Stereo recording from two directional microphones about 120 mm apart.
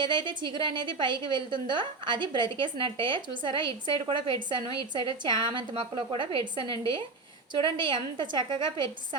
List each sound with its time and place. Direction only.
0.0 s a woman's voice: 40° right (ahead or behind)